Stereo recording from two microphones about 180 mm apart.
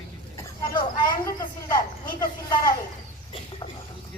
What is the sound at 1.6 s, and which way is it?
Speech, 20° left (ahead or behind).